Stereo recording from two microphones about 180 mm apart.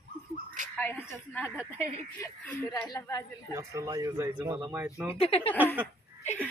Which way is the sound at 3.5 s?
15° right (ahead or behind).